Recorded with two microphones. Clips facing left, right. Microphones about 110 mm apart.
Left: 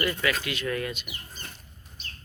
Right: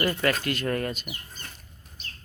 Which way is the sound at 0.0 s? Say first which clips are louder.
Right 3 dB; 45° right (ahead or behind).